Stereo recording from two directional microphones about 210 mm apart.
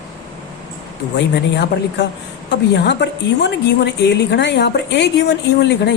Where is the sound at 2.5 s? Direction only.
55° left (ahead or behind).